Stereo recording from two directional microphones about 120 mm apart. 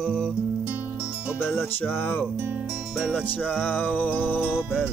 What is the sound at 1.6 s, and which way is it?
Music, 15° left (ahead or behind).